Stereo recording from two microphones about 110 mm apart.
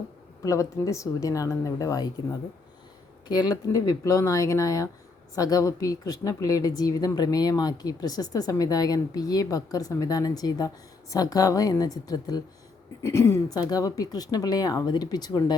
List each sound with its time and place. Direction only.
0.4 s a woman's voice: 30° left (ahead or behind)
3.2 s a woman's voice: 40° left (ahead or behind); by 13.4 s 25° left (ahead or behind)
13.5 s speech: 35° left (ahead or behind)